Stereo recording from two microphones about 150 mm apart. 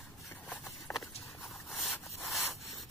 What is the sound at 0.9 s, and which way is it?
Horse, 15° left (ahead or behind).